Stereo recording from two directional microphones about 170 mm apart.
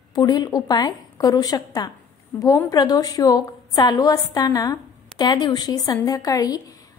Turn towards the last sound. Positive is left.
turn(degrees=20)  # may be behind; listen again after turning